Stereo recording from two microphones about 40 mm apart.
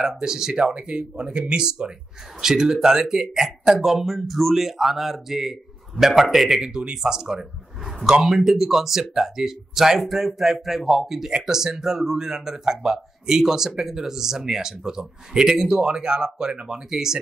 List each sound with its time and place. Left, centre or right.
0.2 s speech: centre
6.6 s speech: centre